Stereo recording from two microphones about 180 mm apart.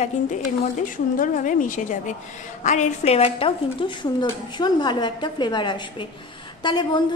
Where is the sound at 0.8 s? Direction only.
50° left (ahead or behind).